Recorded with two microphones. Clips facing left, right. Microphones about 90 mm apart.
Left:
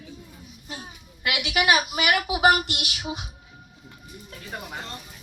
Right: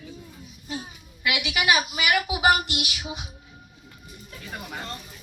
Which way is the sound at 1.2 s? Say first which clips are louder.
Left 1 dB; 55° left (ahead or behind).